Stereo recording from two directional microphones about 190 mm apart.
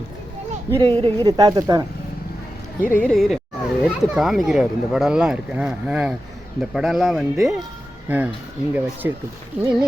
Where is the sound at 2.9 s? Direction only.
5° left (ahead or behind).